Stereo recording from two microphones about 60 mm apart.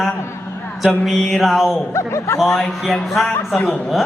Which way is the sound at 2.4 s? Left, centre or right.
Centre.